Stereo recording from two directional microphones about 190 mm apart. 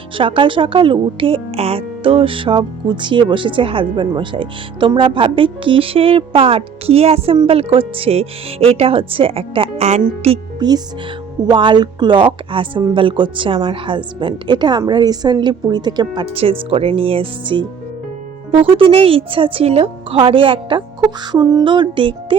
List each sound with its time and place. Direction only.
0.2 s speech: 25° right (ahead or behind)